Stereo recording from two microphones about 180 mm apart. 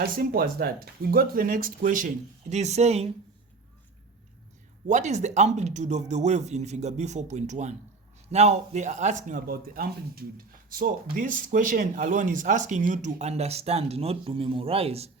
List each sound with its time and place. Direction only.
0.0 s speech: 55° right (ahead or behind); by 3.1 s 35° right (ahead or behind)
4.9 s a man's voice: 40° right (ahead or behind)